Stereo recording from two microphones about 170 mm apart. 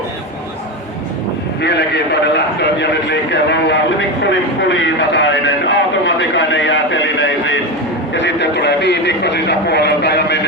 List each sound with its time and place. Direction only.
1.6 s a man's voice: 80° left